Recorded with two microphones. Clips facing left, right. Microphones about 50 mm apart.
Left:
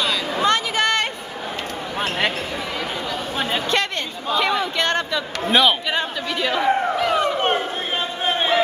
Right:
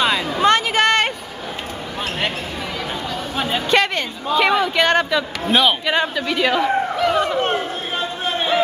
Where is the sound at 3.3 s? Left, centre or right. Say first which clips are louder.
Right 4 dB; centre.